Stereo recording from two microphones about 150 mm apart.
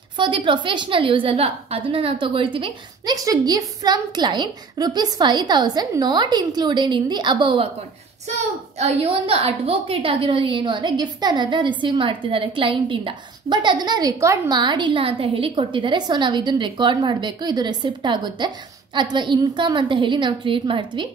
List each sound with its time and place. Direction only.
0.2 s a woman's voice: 35° right (ahead or behind)
8.7 s a woman's voice: 45° right (ahead or behind)